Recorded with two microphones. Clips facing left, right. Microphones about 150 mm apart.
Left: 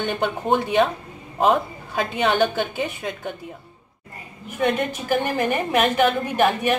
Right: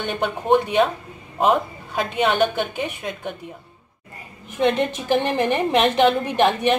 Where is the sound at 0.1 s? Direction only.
Centre (ahead or behind).